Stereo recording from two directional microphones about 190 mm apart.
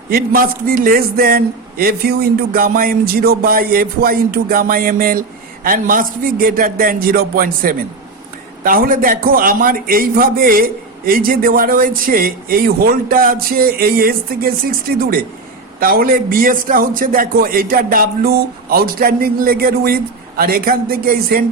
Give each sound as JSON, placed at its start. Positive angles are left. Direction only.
{"t": 0.1, "sound": "a man's voice", "side_deg": -50}